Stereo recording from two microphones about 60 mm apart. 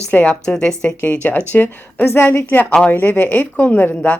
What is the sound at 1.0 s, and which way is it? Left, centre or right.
A woman's voice, left.